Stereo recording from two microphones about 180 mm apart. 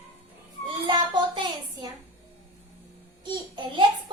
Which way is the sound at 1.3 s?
25° right (ahead or behind).